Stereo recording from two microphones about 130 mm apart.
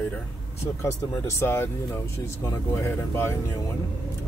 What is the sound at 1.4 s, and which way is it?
Speech, 20° left (ahead or behind).